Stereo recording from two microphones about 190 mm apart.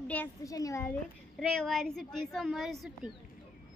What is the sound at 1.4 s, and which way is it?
A woman's voice, centre (ahead or behind).